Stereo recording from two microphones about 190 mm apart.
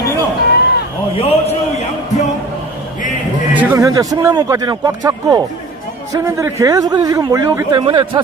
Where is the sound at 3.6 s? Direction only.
15° right (ahead or behind).